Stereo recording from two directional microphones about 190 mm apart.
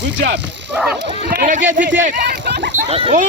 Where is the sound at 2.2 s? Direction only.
60° right (ahead or behind).